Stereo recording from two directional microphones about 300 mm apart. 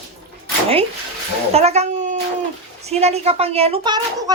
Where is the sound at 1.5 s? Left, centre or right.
Right.